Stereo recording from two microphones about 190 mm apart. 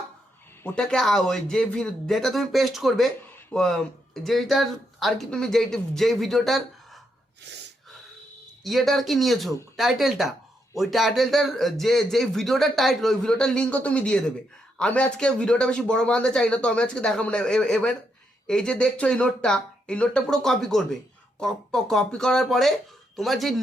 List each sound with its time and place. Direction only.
0.6 s speech: 5° left (ahead or behind)
7.5 s gasp: 65° right (ahead or behind)
8.6 s speech: centre (ahead or behind)